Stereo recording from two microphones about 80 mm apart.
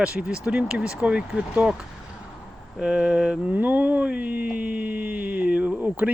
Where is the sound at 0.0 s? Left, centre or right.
Centre.